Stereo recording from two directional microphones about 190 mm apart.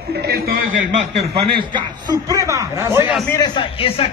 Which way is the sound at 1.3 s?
20° right (ahead or behind).